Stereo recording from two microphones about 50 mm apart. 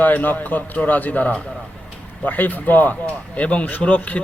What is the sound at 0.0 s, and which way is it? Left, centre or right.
Speech, left.